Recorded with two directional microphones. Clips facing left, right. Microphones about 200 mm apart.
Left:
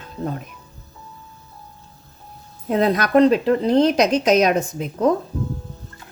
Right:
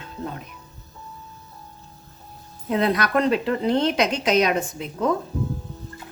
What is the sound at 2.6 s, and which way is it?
Speech, 40° left (ahead or behind).